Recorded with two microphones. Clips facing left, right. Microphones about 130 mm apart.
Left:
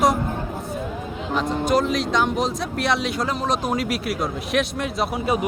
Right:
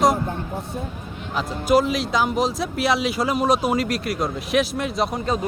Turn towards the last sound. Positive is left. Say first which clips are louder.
# right 1 dB
turn(degrees=0)  # may be behind; listen again after turning